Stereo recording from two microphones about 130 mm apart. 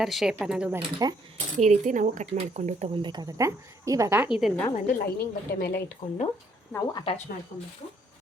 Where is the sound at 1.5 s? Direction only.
70° right (ahead or behind).